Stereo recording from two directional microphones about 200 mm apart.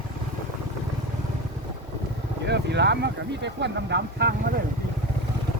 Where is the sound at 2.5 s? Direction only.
60° right (ahead or behind).